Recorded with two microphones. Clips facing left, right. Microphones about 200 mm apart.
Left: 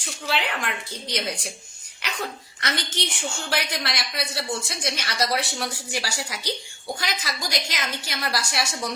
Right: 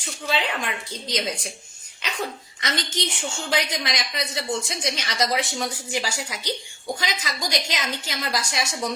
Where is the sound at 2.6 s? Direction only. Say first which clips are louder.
Right 1 dB; 15° right (ahead or behind).